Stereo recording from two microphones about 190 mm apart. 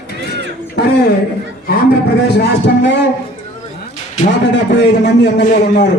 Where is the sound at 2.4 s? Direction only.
65° left (ahead or behind).